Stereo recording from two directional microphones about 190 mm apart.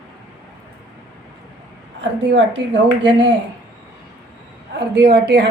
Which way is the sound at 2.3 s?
65° right (ahead or behind).